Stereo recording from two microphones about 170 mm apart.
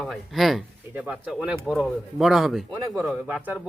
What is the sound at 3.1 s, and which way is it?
Speech, 5° right (ahead or behind).